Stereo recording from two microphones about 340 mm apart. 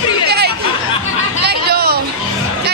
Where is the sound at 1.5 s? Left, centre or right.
Right.